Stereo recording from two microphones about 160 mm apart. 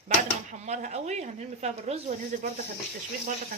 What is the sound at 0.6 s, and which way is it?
Speech, 45° right (ahead or behind).